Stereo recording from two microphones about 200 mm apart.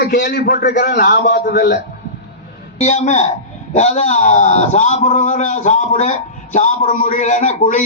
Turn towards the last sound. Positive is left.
turn(degrees=35)  # may be behind; listen again after turning